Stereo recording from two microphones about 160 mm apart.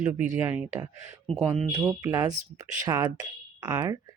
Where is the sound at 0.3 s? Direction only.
15° right (ahead or behind).